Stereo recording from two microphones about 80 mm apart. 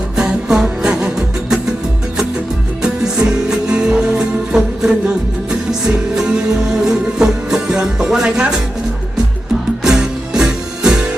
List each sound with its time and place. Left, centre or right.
0.2 s music: centre
2.8 s music: centre
9.8 s music: centre